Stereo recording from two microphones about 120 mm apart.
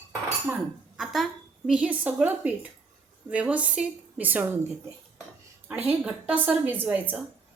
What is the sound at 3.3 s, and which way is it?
Dishes, 10° right (ahead or behind).